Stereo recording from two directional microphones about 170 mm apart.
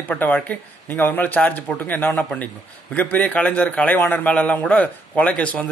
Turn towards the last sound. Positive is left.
turn(degrees=10)  # may be behind; listen again after turning